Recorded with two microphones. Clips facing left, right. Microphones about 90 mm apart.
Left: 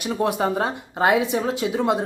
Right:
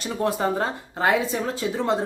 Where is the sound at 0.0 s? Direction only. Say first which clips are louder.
Left 2 dB; 15° left (ahead or behind).